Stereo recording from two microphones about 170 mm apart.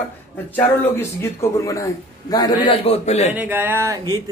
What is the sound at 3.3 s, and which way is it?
Speech, 10° right (ahead or behind).